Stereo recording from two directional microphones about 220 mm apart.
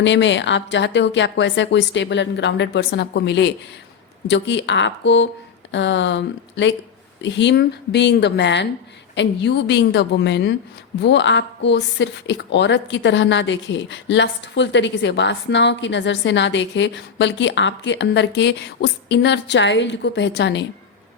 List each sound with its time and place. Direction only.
0.0 s a woman's voice: 55° left (ahead or behind)